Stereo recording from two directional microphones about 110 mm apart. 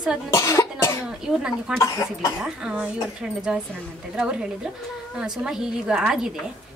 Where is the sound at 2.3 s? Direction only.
10° right (ahead or behind).